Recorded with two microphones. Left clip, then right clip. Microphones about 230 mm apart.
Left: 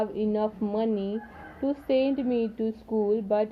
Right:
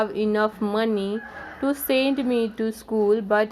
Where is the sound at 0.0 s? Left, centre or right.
Right.